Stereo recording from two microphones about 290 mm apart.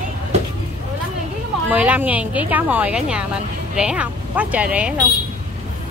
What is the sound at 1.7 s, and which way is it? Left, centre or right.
A woman's voice, centre.